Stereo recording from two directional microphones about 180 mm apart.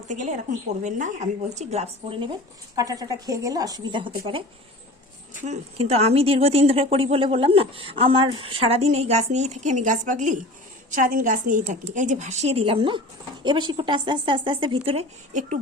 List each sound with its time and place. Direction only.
0.1 s speech: 40° right (ahead or behind)
2.7 s speech: 20° right (ahead or behind); by 15.5 s 40° right (ahead or behind)